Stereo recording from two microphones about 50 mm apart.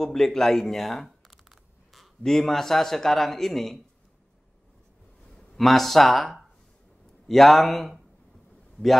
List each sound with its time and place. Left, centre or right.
0.0 s a sound: centre
2.2 s a man's voice: centre
5.6 s a man's voice: centre